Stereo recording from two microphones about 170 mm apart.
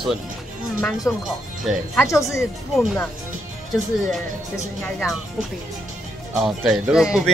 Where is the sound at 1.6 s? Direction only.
Centre (ahead or behind).